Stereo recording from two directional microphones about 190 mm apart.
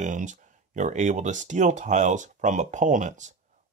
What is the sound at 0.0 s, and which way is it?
Speech, 40° right (ahead or behind).